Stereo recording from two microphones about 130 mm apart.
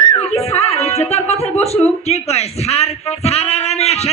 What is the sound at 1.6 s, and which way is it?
A man's voice, 55° left (ahead or behind).